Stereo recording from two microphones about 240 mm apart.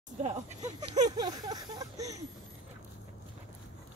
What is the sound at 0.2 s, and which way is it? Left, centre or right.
Speech, right.